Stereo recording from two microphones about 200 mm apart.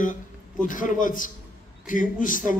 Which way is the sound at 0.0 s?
40° left (ahead or behind).